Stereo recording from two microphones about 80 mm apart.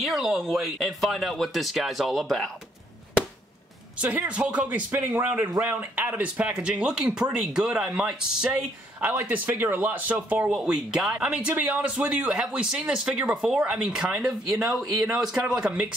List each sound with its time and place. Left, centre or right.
0.0 s speech: centre
4.3 s speech: centre
9.2 s speech: right
10.5 s speech: centre